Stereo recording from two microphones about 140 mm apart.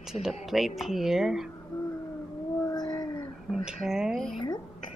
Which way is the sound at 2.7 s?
30° left (ahead or behind).